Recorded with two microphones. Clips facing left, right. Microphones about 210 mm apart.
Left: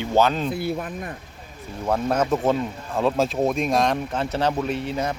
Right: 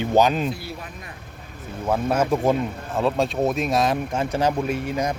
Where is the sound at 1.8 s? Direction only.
5° right (ahead or behind).